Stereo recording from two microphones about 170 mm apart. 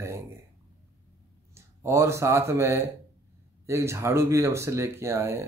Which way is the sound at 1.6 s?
15° right (ahead or behind).